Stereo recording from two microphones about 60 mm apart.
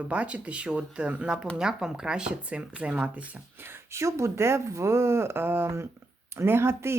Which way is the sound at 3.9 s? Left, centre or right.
Right.